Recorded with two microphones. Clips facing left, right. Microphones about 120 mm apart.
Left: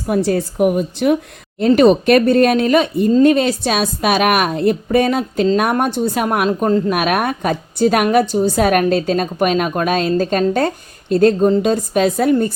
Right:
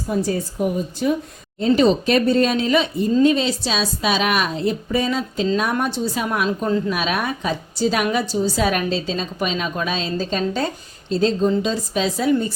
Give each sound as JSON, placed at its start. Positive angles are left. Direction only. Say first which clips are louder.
{"t": 0.1, "sound": "a woman's voice", "louder": "left 6 dB", "side_deg": 80}